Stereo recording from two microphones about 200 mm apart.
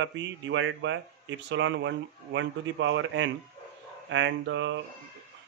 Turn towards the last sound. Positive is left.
turn(degrees=-70)  # may be behind; listen again after turning